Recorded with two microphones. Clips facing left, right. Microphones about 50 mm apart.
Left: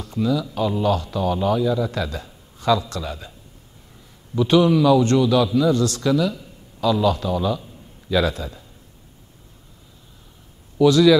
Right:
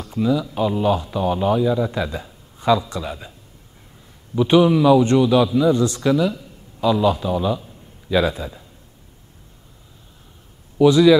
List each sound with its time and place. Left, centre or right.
0.0 s speech: centre
4.4 s speech: centre
10.8 s speech: centre